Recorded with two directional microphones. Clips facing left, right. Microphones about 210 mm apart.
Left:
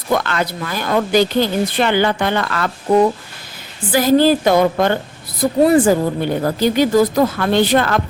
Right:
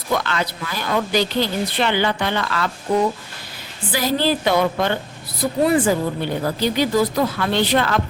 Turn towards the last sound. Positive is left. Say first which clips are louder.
# left 4 dB
turn(degrees=50)  # may be behind; listen again after turning